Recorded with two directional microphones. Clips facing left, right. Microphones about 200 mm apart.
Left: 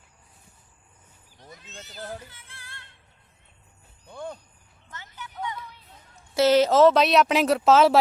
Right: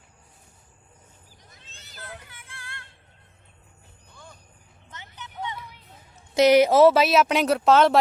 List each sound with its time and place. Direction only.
2.3 s music: 55° right (ahead or behind)
4.1 s music: 60° left (ahead or behind)
4.9 s music: 20° right (ahead or behind)
6.3 s speech: 15° right (ahead or behind); by 7.9 s centre (ahead or behind)